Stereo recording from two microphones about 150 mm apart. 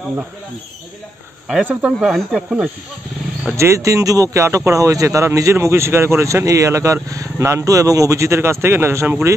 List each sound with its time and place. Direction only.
1.5 s speech: 10° right (ahead or behind)
3.5 s speech: 20° right (ahead or behind)